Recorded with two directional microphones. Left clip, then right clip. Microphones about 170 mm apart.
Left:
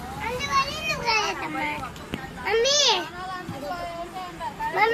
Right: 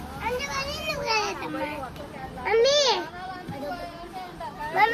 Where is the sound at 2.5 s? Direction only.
50° left (ahead or behind).